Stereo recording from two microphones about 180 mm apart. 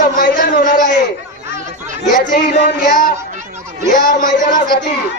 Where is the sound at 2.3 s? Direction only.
55° left (ahead or behind).